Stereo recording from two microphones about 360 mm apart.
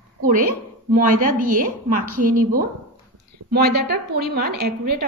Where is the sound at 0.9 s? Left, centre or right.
Right.